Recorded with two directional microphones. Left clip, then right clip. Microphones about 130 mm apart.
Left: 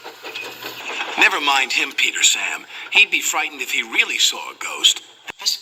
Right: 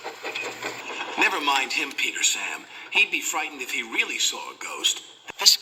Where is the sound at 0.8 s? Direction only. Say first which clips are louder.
Left 7 dB; 15° left (ahead or behind).